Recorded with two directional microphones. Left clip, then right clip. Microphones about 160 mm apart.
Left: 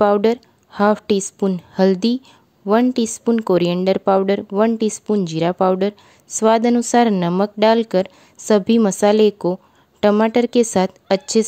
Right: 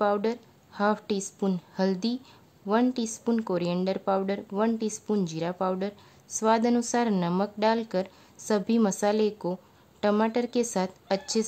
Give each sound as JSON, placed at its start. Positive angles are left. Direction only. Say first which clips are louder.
{"t": 0.0, "sound": "a woman's voice", "louder": "left 11 dB", "side_deg": 45}
{"t": 2.6, "sound": "a woman's voice", "louder": "left 9 dB", "side_deg": 30}
{"t": 2.9, "sound": "a woman's voice", "louder": "left 10 dB", "side_deg": 45}